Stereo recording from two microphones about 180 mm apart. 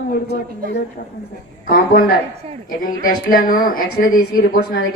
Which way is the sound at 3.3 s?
50° left (ahead or behind).